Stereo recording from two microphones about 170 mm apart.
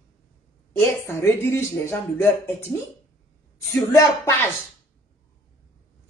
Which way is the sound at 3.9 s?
15° left (ahead or behind).